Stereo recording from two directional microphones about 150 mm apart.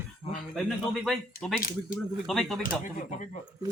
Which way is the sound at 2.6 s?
60° left (ahead or behind).